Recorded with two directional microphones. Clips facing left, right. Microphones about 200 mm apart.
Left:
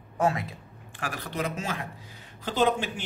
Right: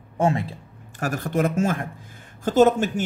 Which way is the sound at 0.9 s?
45° right (ahead or behind).